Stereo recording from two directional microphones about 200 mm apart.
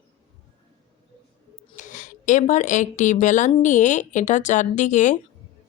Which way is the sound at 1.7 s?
40° left (ahead or behind).